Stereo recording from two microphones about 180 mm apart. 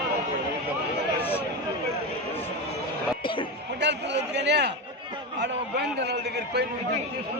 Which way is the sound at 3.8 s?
75° right (ahead or behind).